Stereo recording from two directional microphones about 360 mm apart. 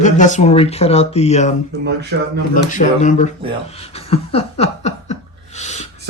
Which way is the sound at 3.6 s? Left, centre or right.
Centre.